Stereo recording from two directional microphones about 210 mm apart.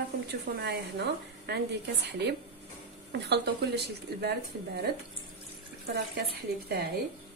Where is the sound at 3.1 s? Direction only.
50° right (ahead or behind).